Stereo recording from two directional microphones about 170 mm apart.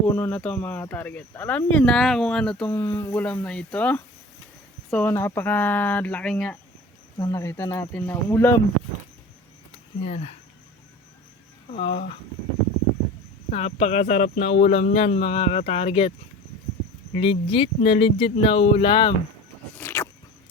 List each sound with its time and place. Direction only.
0.1 s speech: 10° left (ahead or behind)
7.2 s speech: 20° left (ahead or behind)
10.0 s speech: 35° left (ahead or behind)
11.7 s speech: 30° left (ahead or behind)
13.5 s speech: 40° left (ahead or behind)
17.2 s speech: 35° left (ahead or behind)
19.7 s a sound: 15° left (ahead or behind)